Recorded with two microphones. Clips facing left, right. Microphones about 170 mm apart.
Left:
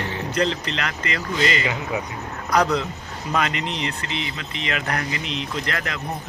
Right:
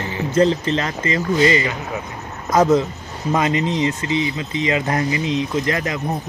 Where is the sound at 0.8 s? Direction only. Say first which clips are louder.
Right 6 dB; 25° right (ahead or behind).